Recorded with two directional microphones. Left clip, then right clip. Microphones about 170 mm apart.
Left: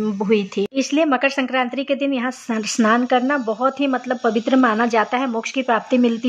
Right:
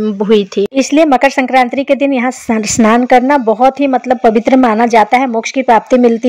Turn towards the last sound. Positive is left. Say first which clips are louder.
# right 10 dB
turn(degrees=-30)  # may be behind; listen again after turning